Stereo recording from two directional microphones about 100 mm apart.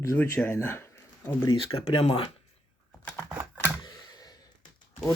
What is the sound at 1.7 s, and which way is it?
Speech, 75° left (ahead or behind).